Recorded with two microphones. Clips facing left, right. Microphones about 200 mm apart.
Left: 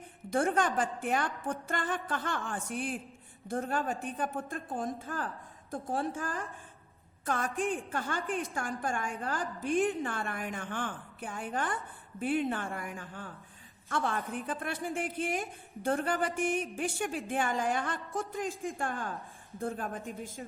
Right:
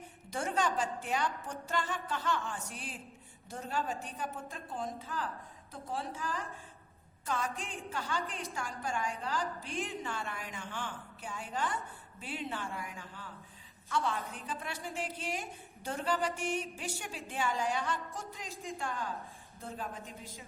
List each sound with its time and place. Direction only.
0.3 s a woman's voice: 55° left (ahead or behind)